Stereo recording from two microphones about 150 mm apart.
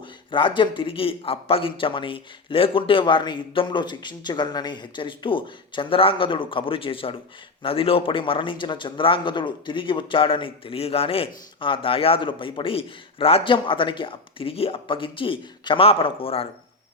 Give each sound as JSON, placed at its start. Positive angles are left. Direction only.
{"t": 0.3, "sound": "speech", "side_deg": 35}